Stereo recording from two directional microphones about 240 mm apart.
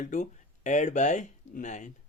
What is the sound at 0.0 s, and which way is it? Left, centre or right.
Speech, left.